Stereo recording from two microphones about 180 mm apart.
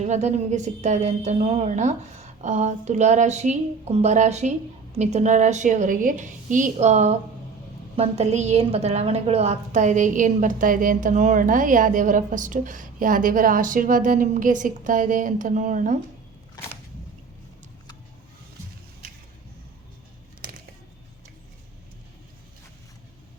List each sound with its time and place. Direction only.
0.0 s a woman's voice: 40° right (ahead or behind)